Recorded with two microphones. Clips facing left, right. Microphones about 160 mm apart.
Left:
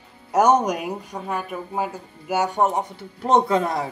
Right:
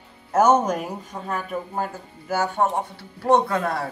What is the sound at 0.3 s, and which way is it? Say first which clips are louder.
Speech: even; 15° left (ahead or behind).